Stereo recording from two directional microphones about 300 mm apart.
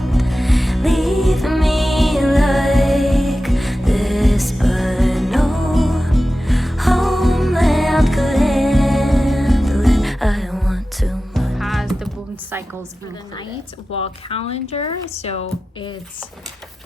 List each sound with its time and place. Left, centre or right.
0.0 s music: centre
13.9 s speech: centre